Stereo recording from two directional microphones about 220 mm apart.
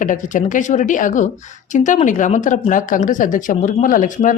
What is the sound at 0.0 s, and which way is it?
Speech, 35° left (ahead or behind).